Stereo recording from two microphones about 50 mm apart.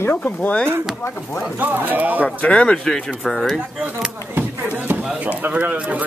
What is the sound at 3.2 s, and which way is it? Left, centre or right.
Speech, centre.